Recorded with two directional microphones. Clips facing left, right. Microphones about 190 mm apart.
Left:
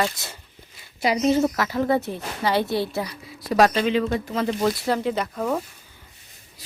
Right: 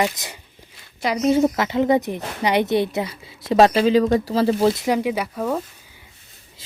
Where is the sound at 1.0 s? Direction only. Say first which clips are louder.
Even; 10° left (ahead or behind).